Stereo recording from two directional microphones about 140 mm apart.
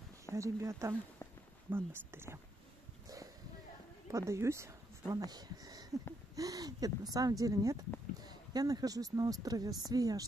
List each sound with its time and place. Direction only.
0.3 s speech: 20° right (ahead or behind)
4.1 s speech: 20° right (ahead or behind)